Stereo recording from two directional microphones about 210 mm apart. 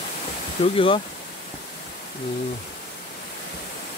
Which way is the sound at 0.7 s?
25° left (ahead or behind).